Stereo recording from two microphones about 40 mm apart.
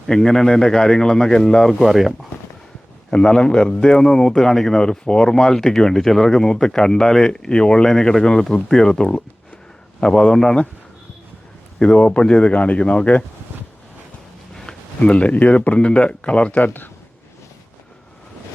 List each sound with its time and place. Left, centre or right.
0.1 s speech: centre
1.8 s speech: centre
3.1 s speech: centre
11.8 s speech: left
15.0 s speech: left